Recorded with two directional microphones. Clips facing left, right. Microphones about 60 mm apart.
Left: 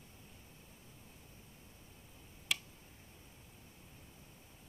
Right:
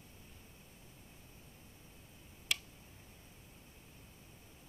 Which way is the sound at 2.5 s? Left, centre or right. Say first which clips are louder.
Even; centre.